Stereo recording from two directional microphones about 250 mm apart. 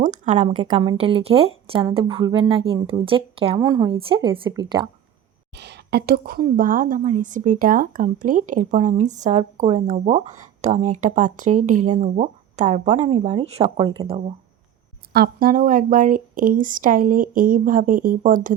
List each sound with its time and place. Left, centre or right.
0.0 s a woman's voice: right
5.5 s a woman's voice: right
15.1 s speech: right